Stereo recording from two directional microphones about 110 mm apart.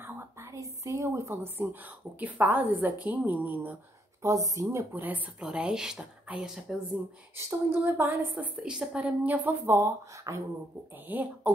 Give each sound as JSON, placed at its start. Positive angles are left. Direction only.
{"t": 0.0, "sound": "a woman's voice", "side_deg": -25}
{"t": 4.2, "sound": "a woman's voice", "side_deg": -30}
{"t": 4.9, "sound": "speech", "side_deg": -15}
{"t": 7.3, "sound": "a woman's voice", "side_deg": -25}
{"t": 11.1, "sound": "speech", "side_deg": -15}